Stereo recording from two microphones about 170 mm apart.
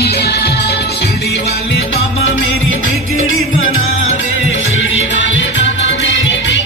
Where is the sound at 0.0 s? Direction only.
70° left (ahead or behind).